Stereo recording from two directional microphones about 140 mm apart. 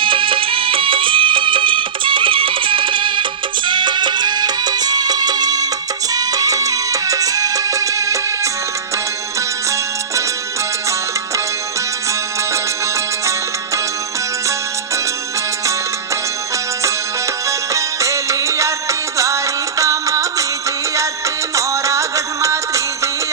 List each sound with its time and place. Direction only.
0.0 s music: 35° right (ahead or behind)
17.7 s music: 20° right (ahead or behind)
21.5 s music: 20° right (ahead or behind)